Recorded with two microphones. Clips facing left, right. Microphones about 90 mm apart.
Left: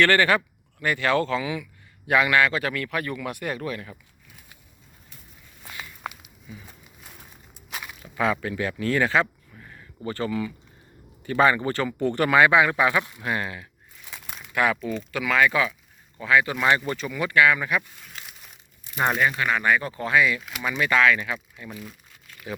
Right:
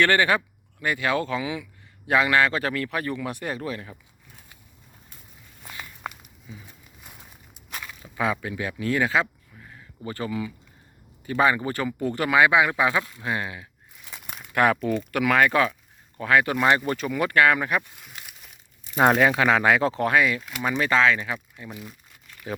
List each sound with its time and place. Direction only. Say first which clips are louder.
0.0 s a man's voice: left 1 dB; 15° right (ahead or behind)
5.6 s walk: even; centre (ahead or behind)
6.5 s a man's voice: left 1 dB; 25° right (ahead or behind)
7.0 s a sound: even; 10° right (ahead or behind)
7.7 s walk: left 1 dB; 15° left (ahead or behind)
8.1 s speech: left 2 dB; 15° right (ahead or behind)
14.1 s crumpling: even; 5° right (ahead or behind)
14.5 s speech: right 3 dB; 55° right (ahead or behind)
18.0 s crumpling: left 1 dB; 5° right (ahead or behind)
19.0 s speech: right 4 dB; 80° right
20.1 s a man's voice: left 5 dB; 45° right (ahead or behind); by 21.3 s 25° right (ahead or behind)
21.6 s speech: even; 15° right (ahead or behind)